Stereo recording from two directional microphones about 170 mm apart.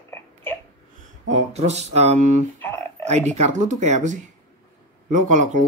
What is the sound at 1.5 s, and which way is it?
Speech, 40° right (ahead or behind).